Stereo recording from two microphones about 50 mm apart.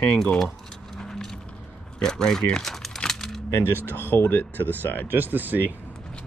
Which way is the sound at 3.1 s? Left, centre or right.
Centre.